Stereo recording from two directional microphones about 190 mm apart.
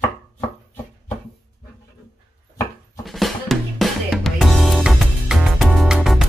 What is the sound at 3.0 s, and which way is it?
Drum kit, centre (ahead or behind).